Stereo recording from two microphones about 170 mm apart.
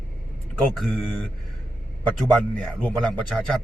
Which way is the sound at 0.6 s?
5° left (ahead or behind).